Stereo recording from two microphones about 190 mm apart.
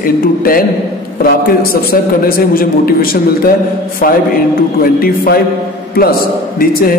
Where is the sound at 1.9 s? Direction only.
50° left (ahead or behind).